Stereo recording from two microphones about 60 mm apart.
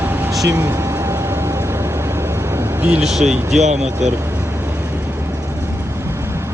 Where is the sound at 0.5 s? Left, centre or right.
Right.